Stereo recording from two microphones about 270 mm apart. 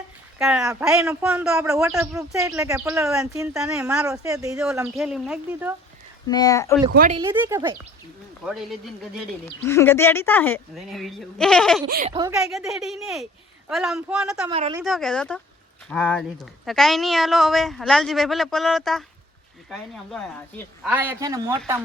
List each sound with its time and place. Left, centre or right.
0.3 s speech: centre
6.2 s a woman's voice: centre
7.3 s a woman's voice: centre
11.9 s a woman's voice: right
12.4 s speech: centre
14.5 s a woman's voice: right
14.8 s speech: centre